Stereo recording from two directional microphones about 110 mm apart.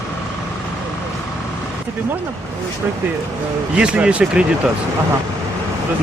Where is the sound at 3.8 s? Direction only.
10° right (ahead or behind).